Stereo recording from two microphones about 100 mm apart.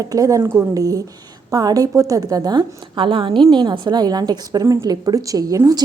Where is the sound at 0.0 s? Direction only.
35° right (ahead or behind).